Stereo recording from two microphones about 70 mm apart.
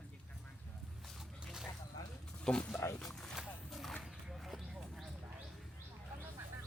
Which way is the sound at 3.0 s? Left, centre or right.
Centre.